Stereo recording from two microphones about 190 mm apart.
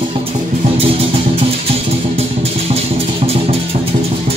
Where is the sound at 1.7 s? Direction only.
30° right (ahead or behind).